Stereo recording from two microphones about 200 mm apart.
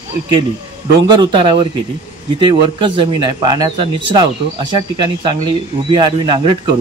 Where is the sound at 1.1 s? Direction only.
25° right (ahead or behind).